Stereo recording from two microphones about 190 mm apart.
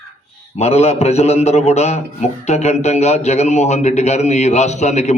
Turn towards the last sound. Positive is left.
turn(degrees=35)  # may be behind; listen again after turning